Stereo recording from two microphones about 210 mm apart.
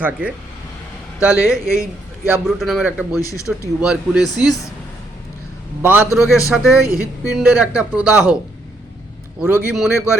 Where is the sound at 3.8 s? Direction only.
5° right (ahead or behind).